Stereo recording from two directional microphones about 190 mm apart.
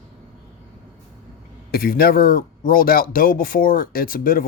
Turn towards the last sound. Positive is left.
turn(degrees=50)  # may be behind; listen again after turning